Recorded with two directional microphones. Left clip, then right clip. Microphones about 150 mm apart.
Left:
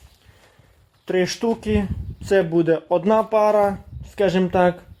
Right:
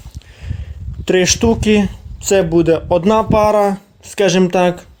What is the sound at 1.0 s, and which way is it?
Speech, 25° right (ahead or behind).